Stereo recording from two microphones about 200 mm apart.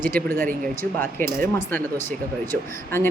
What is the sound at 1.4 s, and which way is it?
Speech, 10° left (ahead or behind).